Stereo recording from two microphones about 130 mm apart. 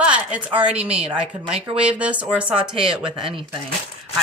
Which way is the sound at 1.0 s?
45° right (ahead or behind).